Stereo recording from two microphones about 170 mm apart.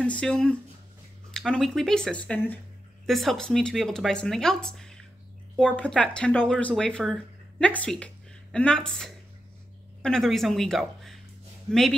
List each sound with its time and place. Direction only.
0.0 s a woman's voice: 5° left (ahead or behind)